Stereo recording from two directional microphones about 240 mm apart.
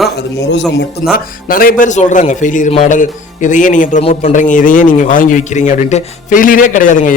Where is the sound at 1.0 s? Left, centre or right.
Left.